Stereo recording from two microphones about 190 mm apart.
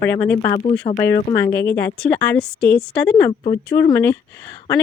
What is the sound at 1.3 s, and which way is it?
A woman's voice, 20° left (ahead or behind).